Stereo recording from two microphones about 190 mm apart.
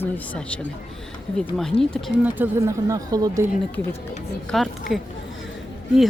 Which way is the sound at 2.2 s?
10° right (ahead or behind).